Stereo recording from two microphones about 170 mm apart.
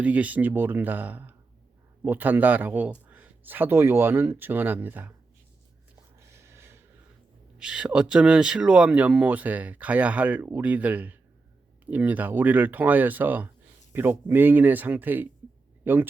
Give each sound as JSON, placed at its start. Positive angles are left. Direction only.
{"t": 0.0, "sound": "speech", "side_deg": -10}
{"t": 6.1, "sound": "a sound", "side_deg": -15}
{"t": 7.6, "sound": "speech", "side_deg": -5}